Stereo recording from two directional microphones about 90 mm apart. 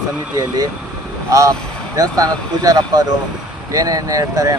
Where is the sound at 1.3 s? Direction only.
35° right (ahead or behind).